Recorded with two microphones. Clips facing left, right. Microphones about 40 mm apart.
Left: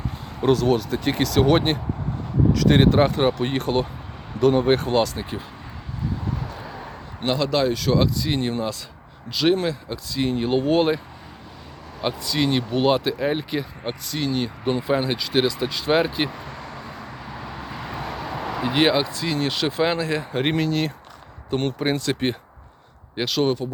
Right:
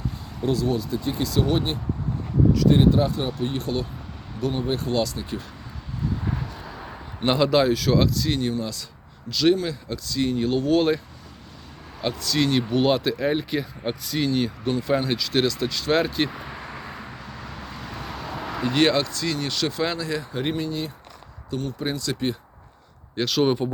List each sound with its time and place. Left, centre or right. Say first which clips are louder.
0.5 s speech: left 4 dB; left
2.6 s speech: left 3 dB; left
4.4 s speech: left 9 dB; left
4.6 s speech: left 5 dB; left
6.4 s a sound: left 2 dB; centre
7.3 s speech: right 2 dB; centre
12.0 s speech: even; centre
14.7 s speech: left 2 dB; centre
16.3 s vehicle: even; centre
17.1 s a sound: left 3 dB; centre
18.7 s speech: left 1 dB; centre; by 20.5 s left
20.5 s speech: left 5 dB; left
21.5 s speech: left 5 dB; left
23.2 s speech: even; centre